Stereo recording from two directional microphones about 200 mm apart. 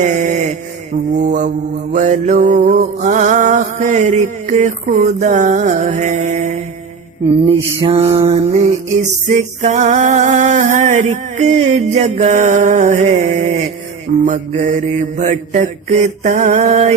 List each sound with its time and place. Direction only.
0.0 s mantra: 40° right (ahead or behind)